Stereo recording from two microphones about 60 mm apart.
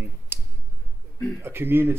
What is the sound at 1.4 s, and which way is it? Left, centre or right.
Speech, right.